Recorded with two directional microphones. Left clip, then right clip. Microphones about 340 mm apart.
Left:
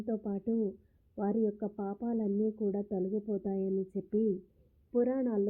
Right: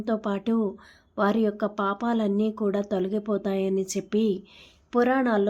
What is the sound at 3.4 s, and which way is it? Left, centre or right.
Speech, right.